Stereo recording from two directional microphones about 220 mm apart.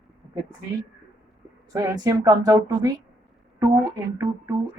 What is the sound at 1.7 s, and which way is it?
Speech, 15° right (ahead or behind).